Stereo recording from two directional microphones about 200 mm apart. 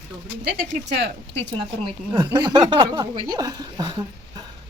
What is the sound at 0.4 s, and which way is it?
Speech, 55° right (ahead or behind).